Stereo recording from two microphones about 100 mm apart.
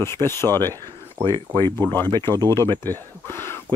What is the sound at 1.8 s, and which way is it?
Speech, 20° left (ahead or behind).